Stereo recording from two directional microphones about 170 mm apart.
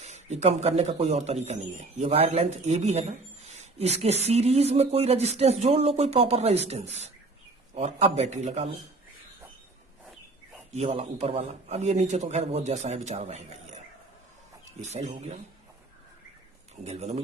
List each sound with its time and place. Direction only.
0.0 s speech: 40° right (ahead or behind)
10.7 s speech: 35° right (ahead or behind)
16.8 s speech: 40° right (ahead or behind)